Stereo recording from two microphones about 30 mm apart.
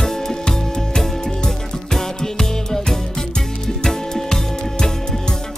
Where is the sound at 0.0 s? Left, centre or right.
Centre.